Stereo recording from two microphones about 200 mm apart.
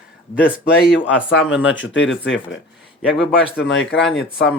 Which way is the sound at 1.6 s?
70° left (ahead or behind).